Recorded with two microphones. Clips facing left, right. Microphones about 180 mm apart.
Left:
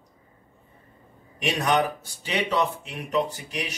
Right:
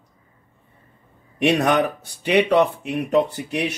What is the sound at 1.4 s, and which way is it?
Speech, 65° right (ahead or behind).